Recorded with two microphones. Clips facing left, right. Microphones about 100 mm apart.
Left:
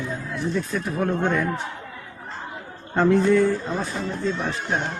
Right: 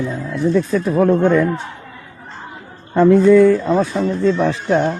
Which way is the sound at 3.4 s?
90° right.